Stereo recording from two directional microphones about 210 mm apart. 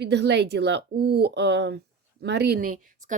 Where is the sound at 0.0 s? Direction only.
55° right (ahead or behind).